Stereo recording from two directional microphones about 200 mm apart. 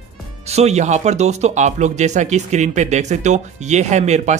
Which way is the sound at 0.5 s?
35° right (ahead or behind).